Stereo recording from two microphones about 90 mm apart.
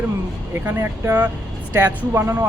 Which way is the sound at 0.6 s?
25° right (ahead or behind).